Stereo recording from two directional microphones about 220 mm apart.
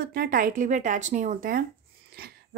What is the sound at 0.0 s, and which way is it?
A woman's voice, 45° right (ahead or behind).